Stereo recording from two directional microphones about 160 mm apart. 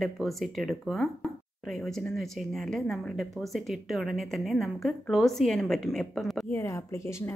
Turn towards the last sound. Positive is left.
turn(degrees=15)  # may be behind; listen again after turning